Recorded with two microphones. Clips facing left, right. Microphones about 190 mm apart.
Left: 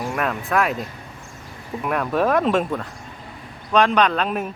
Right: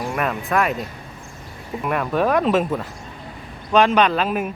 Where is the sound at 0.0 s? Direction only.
Centre (ahead or behind).